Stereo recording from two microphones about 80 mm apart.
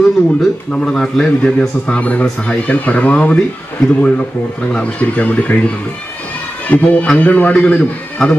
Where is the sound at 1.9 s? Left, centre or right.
Centre.